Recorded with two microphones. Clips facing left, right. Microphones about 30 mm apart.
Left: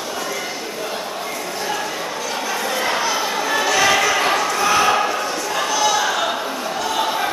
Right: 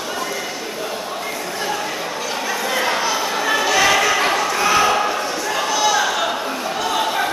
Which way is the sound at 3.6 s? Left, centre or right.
Centre.